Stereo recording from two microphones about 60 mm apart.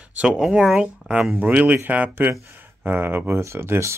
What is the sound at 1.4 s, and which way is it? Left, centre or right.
Speech, right.